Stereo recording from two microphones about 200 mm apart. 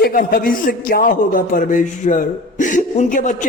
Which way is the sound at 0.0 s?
45° left (ahead or behind).